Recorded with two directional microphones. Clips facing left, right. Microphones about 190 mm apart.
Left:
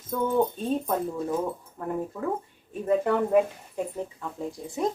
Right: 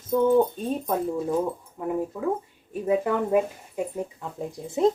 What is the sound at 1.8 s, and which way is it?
Speech, 5° right (ahead or behind).